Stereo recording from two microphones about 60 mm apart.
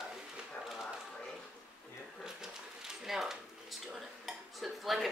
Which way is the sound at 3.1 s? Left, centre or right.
Centre.